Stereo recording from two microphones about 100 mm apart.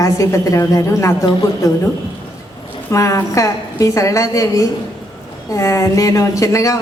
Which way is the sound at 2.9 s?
30° left (ahead or behind).